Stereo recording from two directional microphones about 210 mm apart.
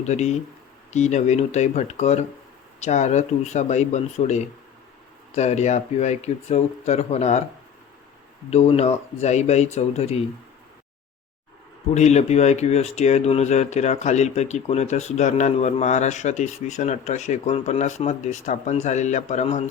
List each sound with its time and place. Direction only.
0.0 s speech: 35° left (ahead or behind)
8.4 s speech: 30° left (ahead or behind)
11.9 s speech: 30° left (ahead or behind)